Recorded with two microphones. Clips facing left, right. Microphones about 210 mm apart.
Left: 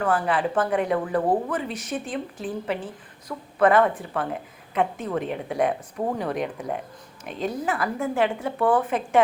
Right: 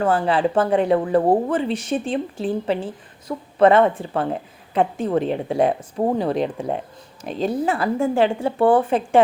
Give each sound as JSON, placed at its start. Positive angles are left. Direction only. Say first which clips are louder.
{"t": 0.0, "sound": "speech", "louder": "right 4 dB", "side_deg": -25}